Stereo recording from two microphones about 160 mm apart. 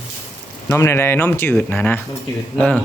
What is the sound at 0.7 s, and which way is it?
Speech, 15° left (ahead or behind).